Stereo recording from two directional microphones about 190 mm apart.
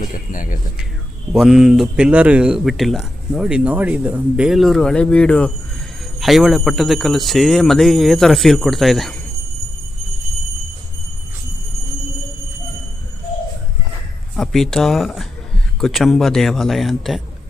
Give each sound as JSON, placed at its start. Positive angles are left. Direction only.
{"t": 0.0, "sound": "speech", "side_deg": 45}
{"t": 1.3, "sound": "speech", "side_deg": 0}
{"t": 14.3, "sound": "speech", "side_deg": 0}